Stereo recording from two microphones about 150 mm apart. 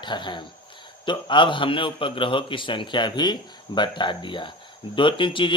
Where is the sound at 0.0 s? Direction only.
30° left (ahead or behind).